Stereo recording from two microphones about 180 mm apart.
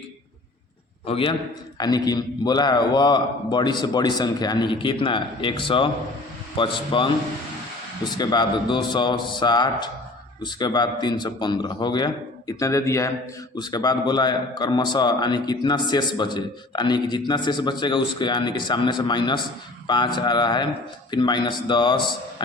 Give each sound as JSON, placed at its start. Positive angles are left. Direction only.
{"t": 1.0, "sound": "a man's voice", "side_deg": 30}